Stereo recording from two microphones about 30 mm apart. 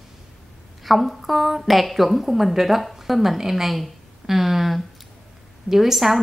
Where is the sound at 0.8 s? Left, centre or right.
Centre.